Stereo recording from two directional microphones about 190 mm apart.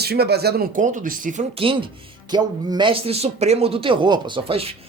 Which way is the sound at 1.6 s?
25° right (ahead or behind).